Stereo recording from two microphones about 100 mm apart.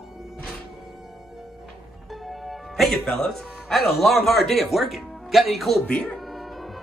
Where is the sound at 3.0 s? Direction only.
5° left (ahead or behind).